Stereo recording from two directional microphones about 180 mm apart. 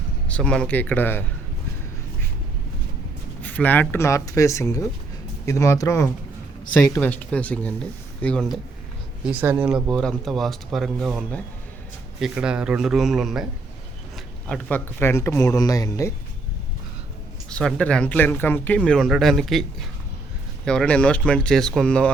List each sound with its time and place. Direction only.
0.3 s speech: 5° left (ahead or behind)
3.4 s speech: 10° left (ahead or behind)
9.2 s speech: 10° right (ahead or behind); by 16.1 s 20° left (ahead or behind)
17.5 s speech: 5° left (ahead or behind)
20.7 s speech: 5° left (ahead or behind)